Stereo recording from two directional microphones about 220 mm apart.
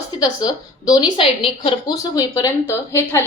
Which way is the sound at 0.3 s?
15° left (ahead or behind).